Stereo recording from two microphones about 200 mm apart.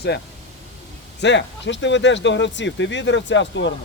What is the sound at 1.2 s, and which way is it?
Speech, 65° left (ahead or behind).